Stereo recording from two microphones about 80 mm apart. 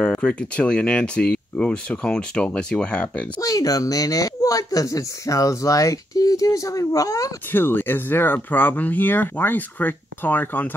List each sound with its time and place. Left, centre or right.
0.0 s speech: centre
3.3 s speech: left
7.5 s speech: left